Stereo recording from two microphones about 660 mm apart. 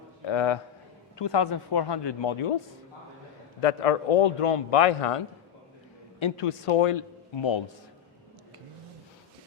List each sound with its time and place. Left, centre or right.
0.3 s a man's voice: left
3.6 s a man's voice: left